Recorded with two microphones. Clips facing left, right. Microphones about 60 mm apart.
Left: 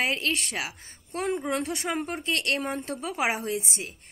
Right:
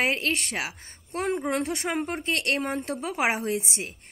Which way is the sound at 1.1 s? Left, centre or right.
Right.